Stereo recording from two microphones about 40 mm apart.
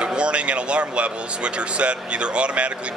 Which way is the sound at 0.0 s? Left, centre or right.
Right.